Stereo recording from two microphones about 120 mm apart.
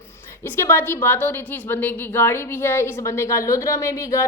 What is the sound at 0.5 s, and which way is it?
A woman's voice, 20° left (ahead or behind).